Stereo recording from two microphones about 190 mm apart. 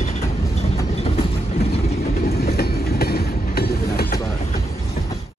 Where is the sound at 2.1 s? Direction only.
55° left (ahead or behind).